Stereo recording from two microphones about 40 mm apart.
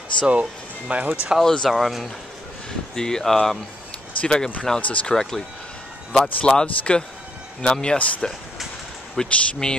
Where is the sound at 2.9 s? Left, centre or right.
Centre.